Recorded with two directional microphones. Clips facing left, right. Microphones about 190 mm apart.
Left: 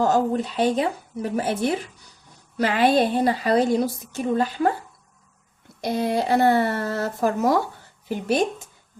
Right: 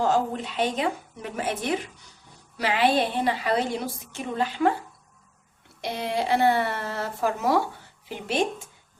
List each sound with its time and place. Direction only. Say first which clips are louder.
0.0 s a woman's voice: left 4 dB; 40° left (ahead or behind)
2.6 s a woman's voice: left 4 dB; 50° left (ahead or behind)
5.8 s a woman's voice: left 5 dB; 40° left (ahead or behind)